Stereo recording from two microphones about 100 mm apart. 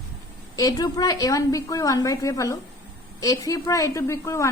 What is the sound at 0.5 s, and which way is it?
A woman's voice, 40° left (ahead or behind).